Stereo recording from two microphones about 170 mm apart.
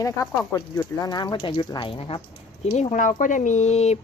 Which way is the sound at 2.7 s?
45° left (ahead or behind).